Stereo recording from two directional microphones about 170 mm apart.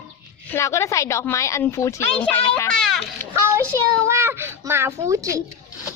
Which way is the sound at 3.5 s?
15° right (ahead or behind).